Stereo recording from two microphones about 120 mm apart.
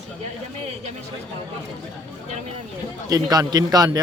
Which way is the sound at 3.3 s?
35° right (ahead or behind).